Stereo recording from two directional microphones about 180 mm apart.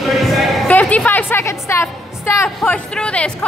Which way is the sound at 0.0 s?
Centre (ahead or behind).